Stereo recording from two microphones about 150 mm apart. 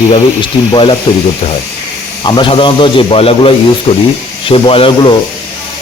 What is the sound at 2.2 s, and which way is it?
Speech, 30° left (ahead or behind).